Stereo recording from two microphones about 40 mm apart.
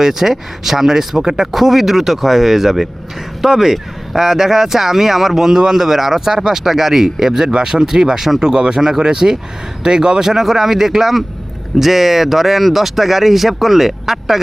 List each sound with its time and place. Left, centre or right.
0.0 s speech: centre